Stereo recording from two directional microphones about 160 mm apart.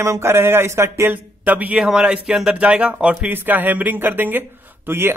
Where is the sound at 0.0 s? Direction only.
15° right (ahead or behind).